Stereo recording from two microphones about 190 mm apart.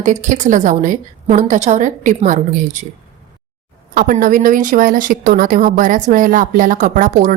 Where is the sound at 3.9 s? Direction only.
50° right (ahead or behind).